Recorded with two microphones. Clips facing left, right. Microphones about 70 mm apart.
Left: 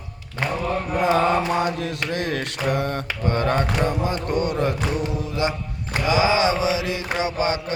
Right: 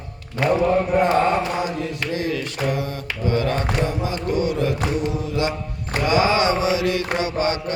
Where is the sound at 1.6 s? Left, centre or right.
Left.